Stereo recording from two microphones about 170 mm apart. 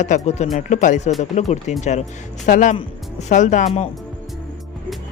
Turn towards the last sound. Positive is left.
turn(degrees=40)  # may be behind; listen again after turning